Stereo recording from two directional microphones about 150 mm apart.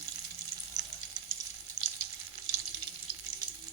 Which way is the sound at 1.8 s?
45° left (ahead or behind).